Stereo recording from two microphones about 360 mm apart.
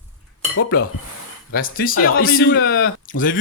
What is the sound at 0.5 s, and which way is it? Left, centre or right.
Dishes, left.